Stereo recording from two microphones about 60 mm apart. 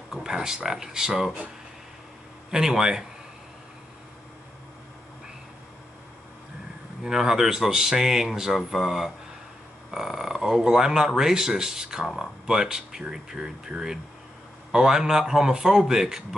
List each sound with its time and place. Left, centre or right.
0.1 s speech: centre
2.5 s speech: centre
7.0 s speech: centre